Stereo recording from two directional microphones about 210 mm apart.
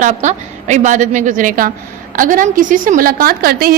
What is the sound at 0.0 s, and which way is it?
A woman's voice, 35° right (ahead or behind).